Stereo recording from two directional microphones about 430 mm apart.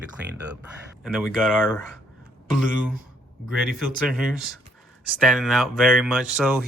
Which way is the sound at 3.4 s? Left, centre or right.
Centre.